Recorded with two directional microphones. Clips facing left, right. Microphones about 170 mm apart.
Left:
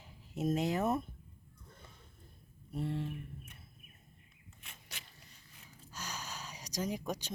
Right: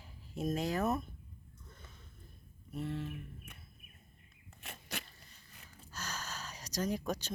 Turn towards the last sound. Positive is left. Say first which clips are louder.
# right 2 dB
turn(degrees=15)  # may be behind; listen again after turning